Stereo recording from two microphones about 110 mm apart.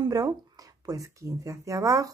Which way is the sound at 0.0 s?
35° right (ahead or behind).